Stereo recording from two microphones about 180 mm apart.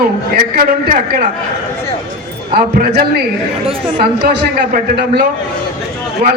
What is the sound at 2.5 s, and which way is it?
Speech, 60° right (ahead or behind).